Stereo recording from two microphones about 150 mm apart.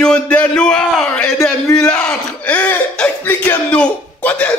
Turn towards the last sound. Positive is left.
turn(degrees=10)  # may be behind; listen again after turning